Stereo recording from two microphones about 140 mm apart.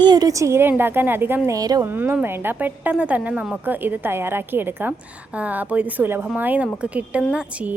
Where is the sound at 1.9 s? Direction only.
15° right (ahead or behind).